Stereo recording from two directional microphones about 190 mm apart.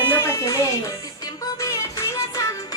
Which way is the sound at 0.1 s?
15° left (ahead or behind).